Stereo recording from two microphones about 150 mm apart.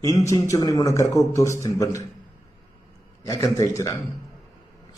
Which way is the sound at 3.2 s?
20° left (ahead or behind).